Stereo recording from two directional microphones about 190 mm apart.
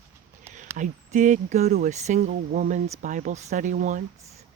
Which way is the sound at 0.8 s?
40° right (ahead or behind).